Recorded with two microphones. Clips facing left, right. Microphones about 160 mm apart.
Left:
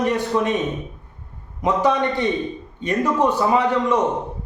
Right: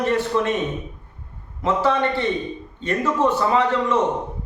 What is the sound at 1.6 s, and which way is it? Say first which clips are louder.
A man's voice: left 1 dB; 15° left (ahead or behind).